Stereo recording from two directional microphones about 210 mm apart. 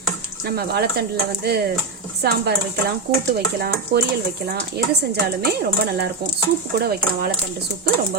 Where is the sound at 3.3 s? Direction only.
45° right (ahead or behind).